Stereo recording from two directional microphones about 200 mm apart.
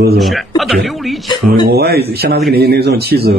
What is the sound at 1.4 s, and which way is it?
A man's voice, 50° right (ahead or behind).